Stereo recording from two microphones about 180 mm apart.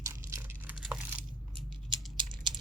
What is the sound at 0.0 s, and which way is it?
Crumpling, 15° right (ahead or behind).